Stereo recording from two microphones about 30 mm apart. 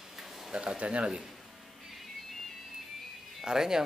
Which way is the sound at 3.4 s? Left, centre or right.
Centre.